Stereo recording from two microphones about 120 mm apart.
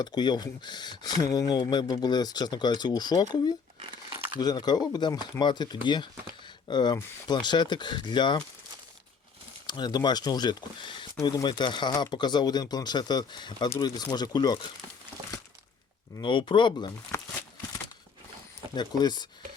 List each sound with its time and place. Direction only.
0.0 s speech: 35° left (ahead or behind)
3.8 s crumpling: 45° right (ahead or behind)
4.4 s speech: 35° left (ahead or behind)
9.6 s speech: 35° left (ahead or behind)
16.2 s speech: 40° left (ahead or behind)
18.7 s speech: 35° left (ahead or behind)